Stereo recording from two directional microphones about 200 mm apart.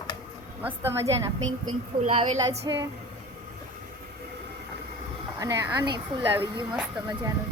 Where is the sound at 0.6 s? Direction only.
10° right (ahead or behind).